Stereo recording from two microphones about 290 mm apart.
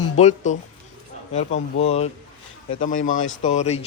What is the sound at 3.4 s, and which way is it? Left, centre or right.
Speech, left.